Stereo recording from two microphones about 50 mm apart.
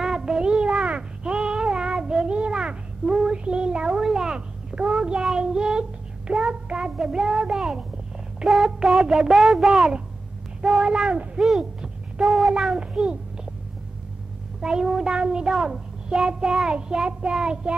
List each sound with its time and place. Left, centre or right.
0.0 s a sound: centre
12.2 s cat: centre
12.7 s a child's voice: centre
14.6 s a child's voice: centre